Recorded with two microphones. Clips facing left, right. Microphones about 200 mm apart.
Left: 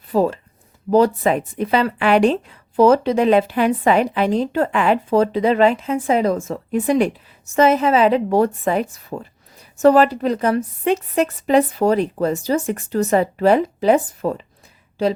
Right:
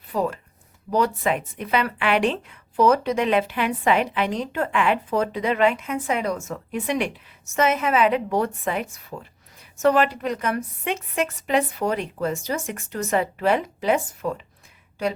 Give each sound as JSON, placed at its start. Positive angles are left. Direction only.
{"t": 0.1, "sound": "speech", "side_deg": 30}